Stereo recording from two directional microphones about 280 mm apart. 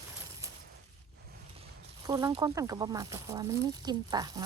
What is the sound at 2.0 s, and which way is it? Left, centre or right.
Speech, centre.